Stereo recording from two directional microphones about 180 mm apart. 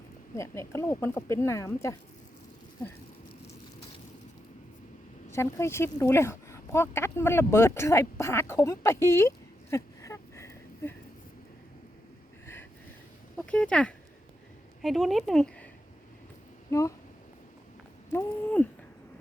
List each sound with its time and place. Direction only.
0.3 s speech: 15° left (ahead or behind)
5.3 s speech: 15° left (ahead or behind)
13.3 s speech: 5° left (ahead or behind)
16.6 s speech: 15° left (ahead or behind)
18.1 s a sound: 10° left (ahead or behind)